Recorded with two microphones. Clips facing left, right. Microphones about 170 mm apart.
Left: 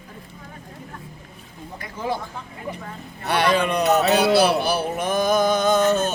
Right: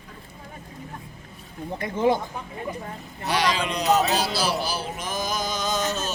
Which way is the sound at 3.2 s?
60° left (ahead or behind).